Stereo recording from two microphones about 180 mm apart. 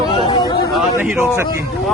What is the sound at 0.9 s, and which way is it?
Speech, 10° right (ahead or behind).